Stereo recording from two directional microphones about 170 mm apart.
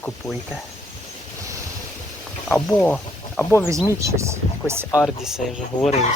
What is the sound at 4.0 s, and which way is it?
Speech, 15° right (ahead or behind).